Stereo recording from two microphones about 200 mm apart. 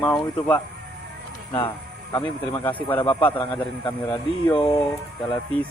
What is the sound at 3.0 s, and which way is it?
Speech, 25° left (ahead or behind).